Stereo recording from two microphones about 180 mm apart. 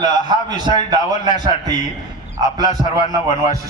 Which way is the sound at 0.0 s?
25° right (ahead or behind).